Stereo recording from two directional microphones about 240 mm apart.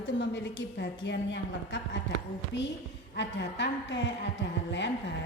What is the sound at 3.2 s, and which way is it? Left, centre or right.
A woman's voice, left.